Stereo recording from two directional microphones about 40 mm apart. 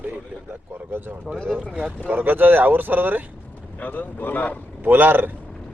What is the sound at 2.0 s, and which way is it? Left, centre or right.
Speech, right.